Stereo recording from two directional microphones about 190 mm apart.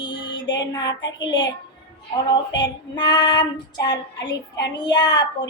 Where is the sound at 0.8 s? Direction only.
70° left (ahead or behind).